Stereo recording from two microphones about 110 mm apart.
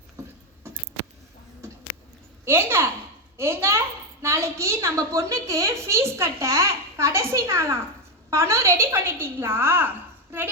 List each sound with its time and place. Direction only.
2.4 s a child's voice: 20° right (ahead or behind)